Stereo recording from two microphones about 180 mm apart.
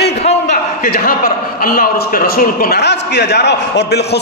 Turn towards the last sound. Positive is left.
turn(degrees=65)  # may be behind; listen again after turning